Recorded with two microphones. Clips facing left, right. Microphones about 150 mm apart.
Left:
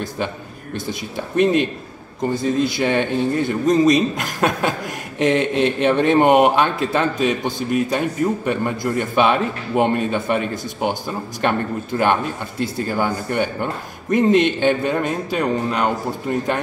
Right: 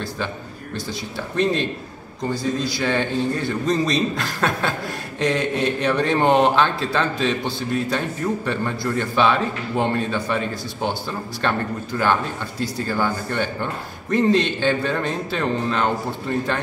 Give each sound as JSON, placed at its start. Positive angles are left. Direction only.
{"t": 0.7, "sound": "speech", "side_deg": 20}